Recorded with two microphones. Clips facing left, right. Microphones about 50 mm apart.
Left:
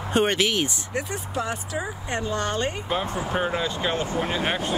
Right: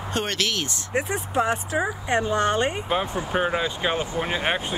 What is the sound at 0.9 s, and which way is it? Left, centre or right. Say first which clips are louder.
Speech: right 4 dB; right.